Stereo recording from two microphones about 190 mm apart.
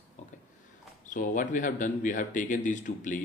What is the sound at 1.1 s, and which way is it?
Speech, 45° left (ahead or behind).